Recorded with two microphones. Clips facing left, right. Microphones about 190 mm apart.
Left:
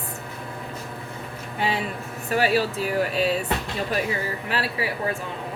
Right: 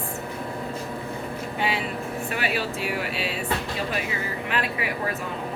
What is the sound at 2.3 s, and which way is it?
Speech, 40° left (ahead or behind).